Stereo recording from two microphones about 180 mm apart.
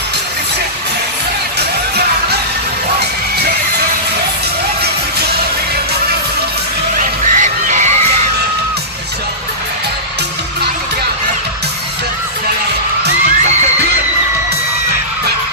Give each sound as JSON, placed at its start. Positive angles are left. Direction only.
{"t": 7.0, "sound": "music", "side_deg": -45}